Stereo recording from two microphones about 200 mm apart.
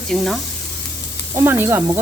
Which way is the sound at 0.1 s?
Centre (ahead or behind).